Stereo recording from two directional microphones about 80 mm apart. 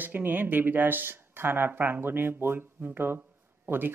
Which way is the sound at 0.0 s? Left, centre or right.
Right.